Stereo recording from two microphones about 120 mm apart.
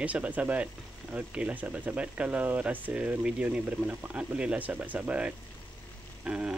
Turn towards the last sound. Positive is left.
turn(degrees=-10)  # may be behind; listen again after turning